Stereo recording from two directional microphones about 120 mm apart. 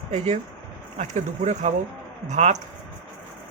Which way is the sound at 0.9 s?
75° right (ahead or behind).